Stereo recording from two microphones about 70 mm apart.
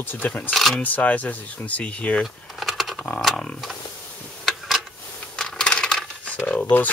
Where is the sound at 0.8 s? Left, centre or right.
Left.